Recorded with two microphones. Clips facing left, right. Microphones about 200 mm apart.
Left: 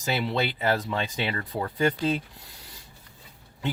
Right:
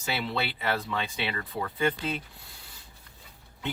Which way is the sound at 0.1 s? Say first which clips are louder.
Left 4 dB; 40° left (ahead or behind).